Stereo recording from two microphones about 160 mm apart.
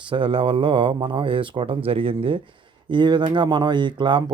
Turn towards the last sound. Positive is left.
turn(degrees=-30)  # may be behind; listen again after turning